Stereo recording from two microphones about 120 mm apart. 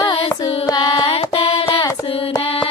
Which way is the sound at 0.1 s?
40° left (ahead or behind).